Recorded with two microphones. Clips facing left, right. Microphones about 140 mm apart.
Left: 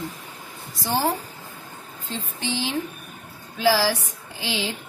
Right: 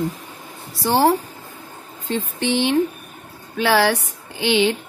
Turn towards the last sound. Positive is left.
turn(degrees=-65)  # may be behind; listen again after turning